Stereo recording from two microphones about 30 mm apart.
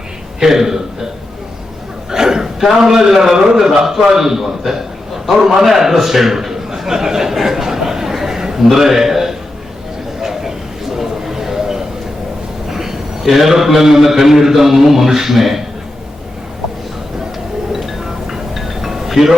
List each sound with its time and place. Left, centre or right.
0.3 s a man's voice: centre
2.0 s a sound: centre
2.7 s a man's voice: centre
7.3 s a sound: centre
12.6 s a man's voice: centre
17.7 s music: centre